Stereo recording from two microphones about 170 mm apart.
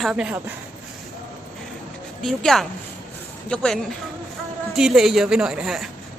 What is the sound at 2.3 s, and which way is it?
Speech, centre (ahead or behind).